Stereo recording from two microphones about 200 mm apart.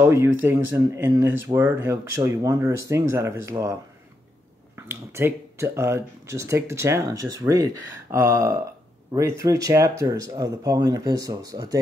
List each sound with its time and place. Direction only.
0.0 s speech: 15° right (ahead or behind)
4.7 s speech: 10° right (ahead or behind)